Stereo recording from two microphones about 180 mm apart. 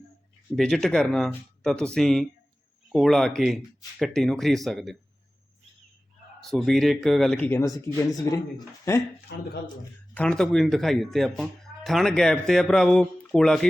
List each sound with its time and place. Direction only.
0.5 s speech: centre (ahead or behind)
6.5 s a man's voice: centre (ahead or behind)
9.3 s speech: 60° left (ahead or behind)
10.2 s speech: 5° left (ahead or behind)